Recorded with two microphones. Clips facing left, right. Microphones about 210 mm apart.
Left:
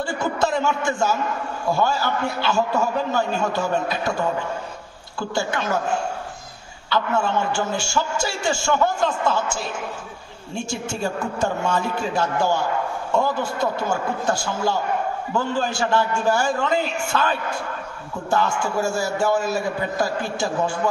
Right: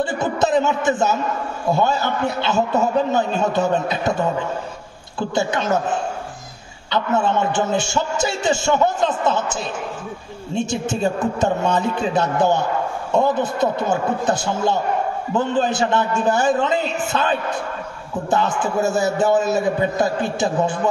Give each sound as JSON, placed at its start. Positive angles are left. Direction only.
{"t": 0.0, "sound": "a man's voice", "side_deg": -20}
{"t": 5.3, "sound": "a man's voice", "side_deg": -20}
{"t": 7.2, "sound": "a man's voice", "side_deg": -20}